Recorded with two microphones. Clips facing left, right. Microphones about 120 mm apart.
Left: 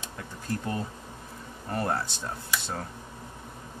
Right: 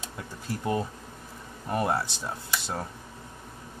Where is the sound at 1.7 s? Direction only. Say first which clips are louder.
Right 2 dB; 15° right (ahead or behind).